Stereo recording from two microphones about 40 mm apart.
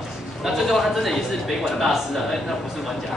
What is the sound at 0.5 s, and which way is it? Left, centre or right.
A man's voice, centre.